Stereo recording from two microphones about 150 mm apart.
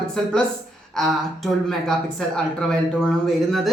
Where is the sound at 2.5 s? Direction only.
5° left (ahead or behind).